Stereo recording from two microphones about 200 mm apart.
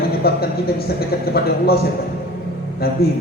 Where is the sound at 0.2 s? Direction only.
50° left (ahead or behind).